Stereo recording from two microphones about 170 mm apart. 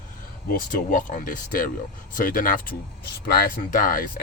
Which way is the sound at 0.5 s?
50° left (ahead or behind).